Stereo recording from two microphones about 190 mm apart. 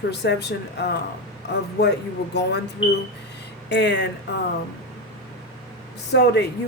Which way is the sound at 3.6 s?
65° left (ahead or behind).